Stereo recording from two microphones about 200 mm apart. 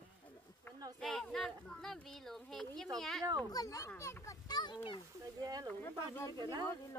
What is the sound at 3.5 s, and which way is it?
A child's voice, 15° left (ahead or behind).